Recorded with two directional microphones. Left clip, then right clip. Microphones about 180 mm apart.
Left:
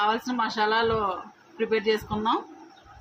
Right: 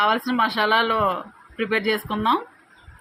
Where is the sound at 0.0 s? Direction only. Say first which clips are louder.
Right 5 dB; 40° right (ahead or behind).